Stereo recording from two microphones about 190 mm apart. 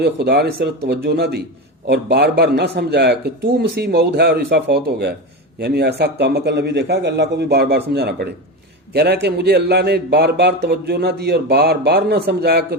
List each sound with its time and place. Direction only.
0.0 s a man's voice: 60° right (ahead or behind)